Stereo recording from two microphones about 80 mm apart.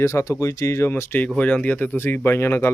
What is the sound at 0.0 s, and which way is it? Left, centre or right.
Speech, left.